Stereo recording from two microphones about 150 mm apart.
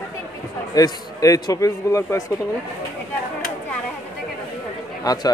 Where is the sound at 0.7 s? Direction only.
25° left (ahead or behind).